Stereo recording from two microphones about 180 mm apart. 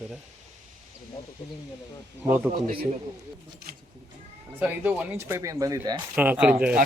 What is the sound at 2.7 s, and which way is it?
Speech, 30° right (ahead or behind).